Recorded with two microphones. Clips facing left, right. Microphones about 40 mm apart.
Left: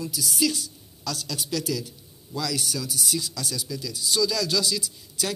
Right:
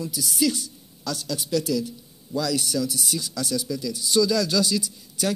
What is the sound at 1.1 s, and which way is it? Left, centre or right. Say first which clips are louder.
Speech: right 2 dB; right.